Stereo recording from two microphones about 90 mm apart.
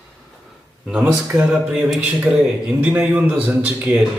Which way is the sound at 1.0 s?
10° right (ahead or behind).